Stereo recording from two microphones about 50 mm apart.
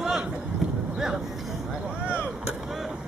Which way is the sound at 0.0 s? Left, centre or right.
Centre.